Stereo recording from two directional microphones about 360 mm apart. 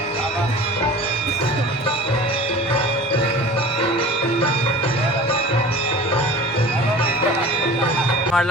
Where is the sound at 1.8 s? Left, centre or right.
Centre.